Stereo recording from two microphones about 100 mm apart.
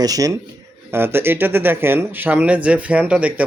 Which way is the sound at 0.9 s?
25° right (ahead or behind).